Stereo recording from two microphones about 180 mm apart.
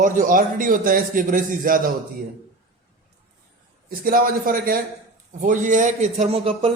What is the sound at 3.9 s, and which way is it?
A man's voice, 55° right (ahead or behind).